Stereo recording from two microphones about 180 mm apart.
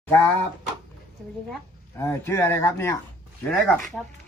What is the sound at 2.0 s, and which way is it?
Speech, 15° left (ahead or behind).